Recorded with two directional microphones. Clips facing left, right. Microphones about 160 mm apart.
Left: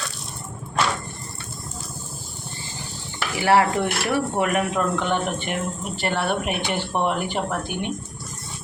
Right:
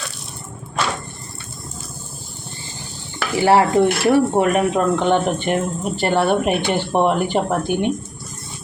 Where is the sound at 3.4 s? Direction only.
25° right (ahead or behind).